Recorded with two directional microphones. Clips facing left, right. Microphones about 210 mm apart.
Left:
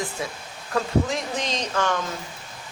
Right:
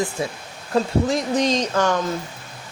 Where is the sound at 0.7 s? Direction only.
40° right (ahead or behind).